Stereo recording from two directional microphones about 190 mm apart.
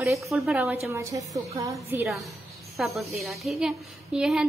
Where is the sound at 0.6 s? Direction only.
15° right (ahead or behind).